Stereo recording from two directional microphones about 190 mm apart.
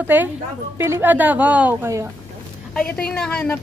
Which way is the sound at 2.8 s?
5° left (ahead or behind).